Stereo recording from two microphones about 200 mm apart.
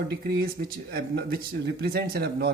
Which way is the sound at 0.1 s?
50° right (ahead or behind).